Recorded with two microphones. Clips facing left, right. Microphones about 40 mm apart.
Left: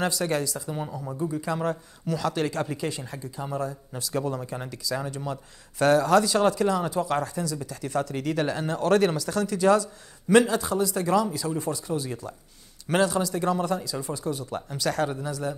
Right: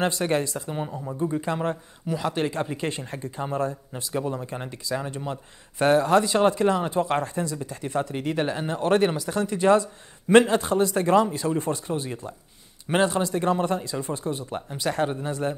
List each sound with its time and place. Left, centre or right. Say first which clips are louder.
0.0 s speech: right 2 dB; right
2.9 s speech: right 3 dB; right
3.9 s speech: even; right